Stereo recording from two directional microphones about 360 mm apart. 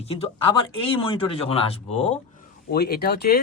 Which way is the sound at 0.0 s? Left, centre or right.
Centre.